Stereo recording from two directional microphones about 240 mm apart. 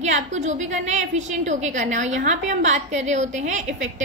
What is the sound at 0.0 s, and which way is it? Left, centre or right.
A woman's voice, right.